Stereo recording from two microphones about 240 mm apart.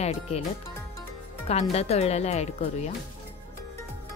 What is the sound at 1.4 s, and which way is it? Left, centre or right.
Speech, left.